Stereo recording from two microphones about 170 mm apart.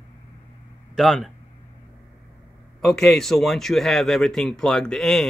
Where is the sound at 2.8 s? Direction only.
5° left (ahead or behind).